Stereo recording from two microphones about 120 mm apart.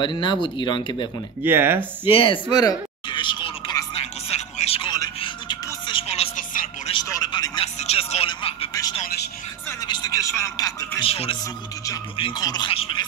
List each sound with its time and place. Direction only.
0.0 s speech: 40° left (ahead or behind)
1.4 s speech: 20° right (ahead or behind)
2.0 s speech: 50° left (ahead or behind)
2.5 s a sound: 35° left (ahead or behind)
4.0 s music: 60° left (ahead or behind)
6.0 s music: 60° left (ahead or behind)
6.9 s a sound: 40° left (ahead or behind)
7.6 s music: 60° left (ahead or behind)
9.8 s vehicle: 35° left (ahead or behind)
10.2 s music: 25° left (ahead or behind)
11.0 s music: 55° left (ahead or behind)
12.4 s speech: 35° left (ahead or behind)
12.7 s a sound: 50° left (ahead or behind)